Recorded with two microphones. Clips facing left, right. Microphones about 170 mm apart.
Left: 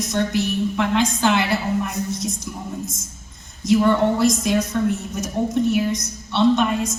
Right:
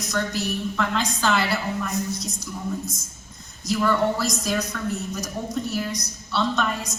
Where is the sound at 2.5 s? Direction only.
20° left (ahead or behind).